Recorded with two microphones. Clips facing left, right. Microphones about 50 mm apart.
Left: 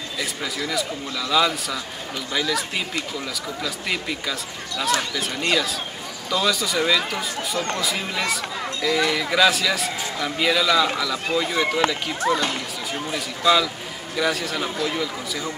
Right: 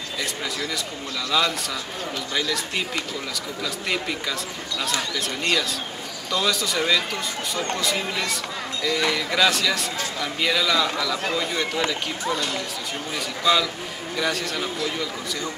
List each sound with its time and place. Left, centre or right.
0.2 s a man's voice: centre
3.6 s a man's voice: centre
12.3 s speech: left
13.4 s a man's voice: centre